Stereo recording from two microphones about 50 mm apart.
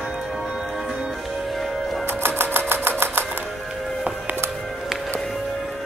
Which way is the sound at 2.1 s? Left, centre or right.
Right.